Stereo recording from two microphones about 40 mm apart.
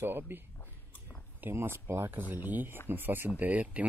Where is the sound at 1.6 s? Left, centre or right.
Right.